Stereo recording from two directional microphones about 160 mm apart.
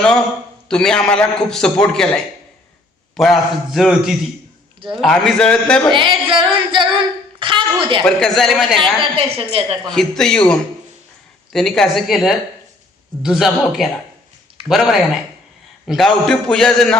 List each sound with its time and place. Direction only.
0.7 s a man's voice: 5° left (ahead or behind)
5.9 s a woman's voice: 30° right (ahead or behind)
6.3 s a sound: 30° right (ahead or behind)
8.0 s a man's voice: centre (ahead or behind)
9.0 s a woman's voice: 35° right (ahead or behind)
9.8 s a man's voice: 5° left (ahead or behind)